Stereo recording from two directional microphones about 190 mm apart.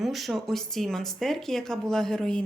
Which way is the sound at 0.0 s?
Centre (ahead or behind).